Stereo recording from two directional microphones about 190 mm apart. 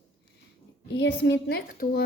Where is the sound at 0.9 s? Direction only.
70° left (ahead or behind); by 2.0 s 50° left (ahead or behind).